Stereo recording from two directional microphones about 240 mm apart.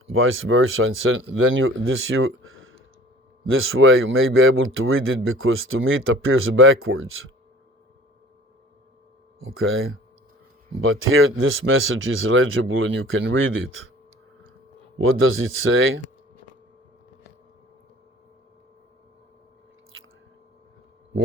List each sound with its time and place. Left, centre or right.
0.1 s speech: right
9.4 s speech: right
14.9 s speech: right